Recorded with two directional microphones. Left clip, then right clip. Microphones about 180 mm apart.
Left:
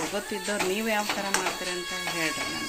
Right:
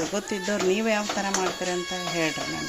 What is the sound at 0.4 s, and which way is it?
Speech, 40° right (ahead or behind).